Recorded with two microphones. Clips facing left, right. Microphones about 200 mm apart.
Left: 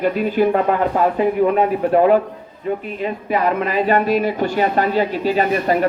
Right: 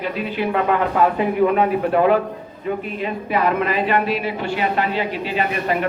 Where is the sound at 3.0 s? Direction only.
40° left (ahead or behind).